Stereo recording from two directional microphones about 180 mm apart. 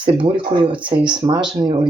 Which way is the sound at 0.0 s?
30° right (ahead or behind).